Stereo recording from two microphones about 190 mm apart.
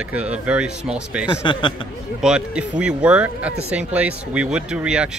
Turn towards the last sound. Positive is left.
turn(degrees=-5)  # may be behind; listen again after turning